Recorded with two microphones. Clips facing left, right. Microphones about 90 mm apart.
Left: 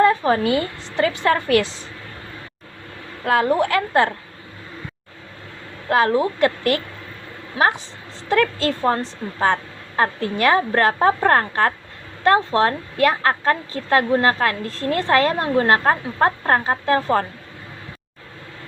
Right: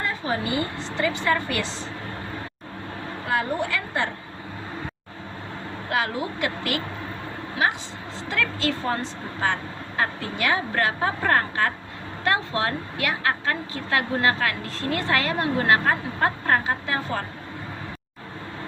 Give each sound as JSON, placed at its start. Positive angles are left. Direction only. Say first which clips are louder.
{"t": 0.1, "sound": "a woman's voice", "louder": "left 8 dB", "side_deg": 55}
{"t": 3.2, "sound": "a woman's voice", "louder": "left 8 dB", "side_deg": 65}
{"t": 5.9, "sound": "a woman's voice", "louder": "left 9 dB", "side_deg": 45}